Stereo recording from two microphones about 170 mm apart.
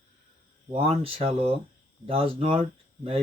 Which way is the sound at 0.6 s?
35° right (ahead or behind).